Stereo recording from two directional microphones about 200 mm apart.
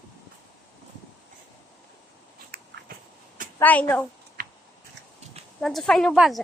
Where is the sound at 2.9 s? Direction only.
45° right (ahead or behind).